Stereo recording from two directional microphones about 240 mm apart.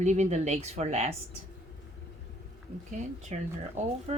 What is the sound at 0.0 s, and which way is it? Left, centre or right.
Speech, right.